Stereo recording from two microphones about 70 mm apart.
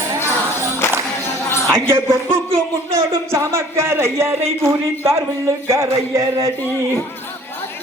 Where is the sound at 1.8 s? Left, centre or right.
Right.